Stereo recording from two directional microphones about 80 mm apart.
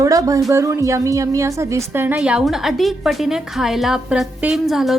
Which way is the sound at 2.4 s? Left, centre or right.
Centre.